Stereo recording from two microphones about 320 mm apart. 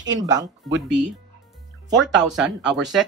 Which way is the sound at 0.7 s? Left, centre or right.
Right.